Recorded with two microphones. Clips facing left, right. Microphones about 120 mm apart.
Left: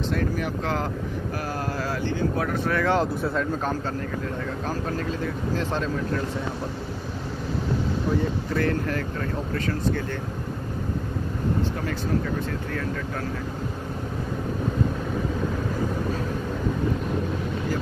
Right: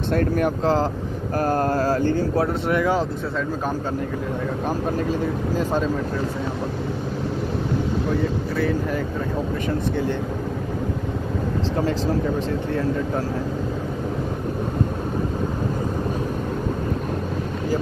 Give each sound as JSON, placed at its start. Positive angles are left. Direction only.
{"t": 0.1, "sound": "speech", "side_deg": -50}
{"t": 2.8, "sound": "speech", "side_deg": -5}
{"t": 5.6, "sound": "speech", "side_deg": -10}
{"t": 8.5, "sound": "speech", "side_deg": -5}
{"t": 9.7, "sound": "speech", "side_deg": -20}